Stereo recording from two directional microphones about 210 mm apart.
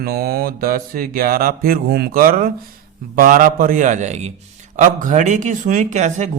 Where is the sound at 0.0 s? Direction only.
45° right (ahead or behind).